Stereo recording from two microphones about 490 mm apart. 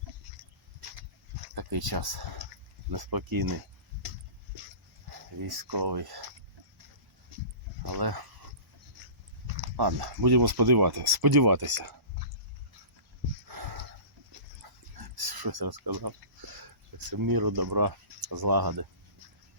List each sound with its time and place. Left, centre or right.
1.5 s speech: right
5.4 s speech: right
7.8 s speech: right
9.7 s speech: right
13.5 s dog: right
17.1 s speech: right